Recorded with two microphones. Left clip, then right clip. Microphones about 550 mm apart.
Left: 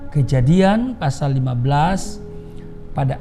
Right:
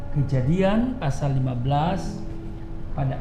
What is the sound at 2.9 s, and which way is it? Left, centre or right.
Speech, left.